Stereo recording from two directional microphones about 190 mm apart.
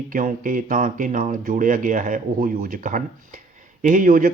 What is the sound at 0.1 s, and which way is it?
Speech, 45° right (ahead or behind).